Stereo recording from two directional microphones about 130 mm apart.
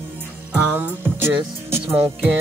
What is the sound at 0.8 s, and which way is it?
Music, 15° right (ahead or behind).